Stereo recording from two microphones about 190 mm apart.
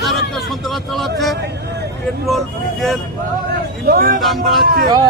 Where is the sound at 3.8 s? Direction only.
55° right (ahead or behind).